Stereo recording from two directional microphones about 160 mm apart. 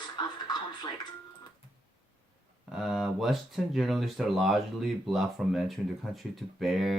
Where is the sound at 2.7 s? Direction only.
Centre (ahead or behind).